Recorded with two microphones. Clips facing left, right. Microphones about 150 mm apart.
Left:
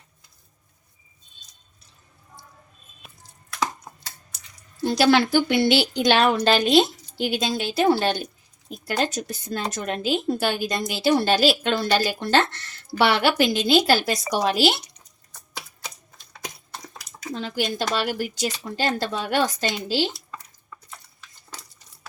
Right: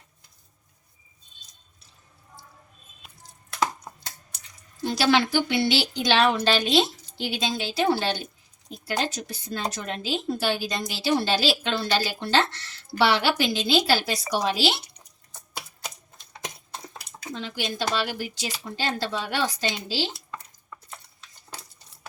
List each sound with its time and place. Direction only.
4.8 s a woman's voice: 45° left (ahead or behind)
17.3 s a woman's voice: 45° left (ahead or behind)